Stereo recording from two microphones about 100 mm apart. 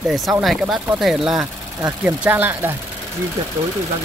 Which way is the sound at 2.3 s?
20° right (ahead or behind).